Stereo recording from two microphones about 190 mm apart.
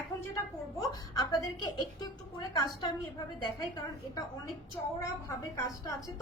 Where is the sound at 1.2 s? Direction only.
20° left (ahead or behind).